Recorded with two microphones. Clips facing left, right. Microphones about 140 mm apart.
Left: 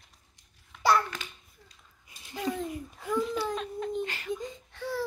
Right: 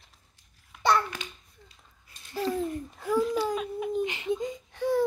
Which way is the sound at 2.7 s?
Centre (ahead or behind).